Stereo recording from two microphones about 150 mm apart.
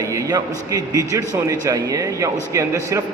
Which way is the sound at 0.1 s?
20° right (ahead or behind).